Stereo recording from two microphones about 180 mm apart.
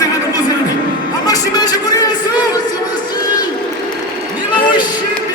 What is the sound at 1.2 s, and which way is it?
Music, 20° left (ahead or behind).